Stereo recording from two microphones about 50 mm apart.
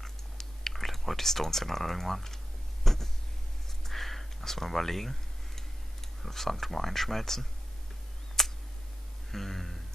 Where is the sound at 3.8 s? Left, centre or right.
Centre.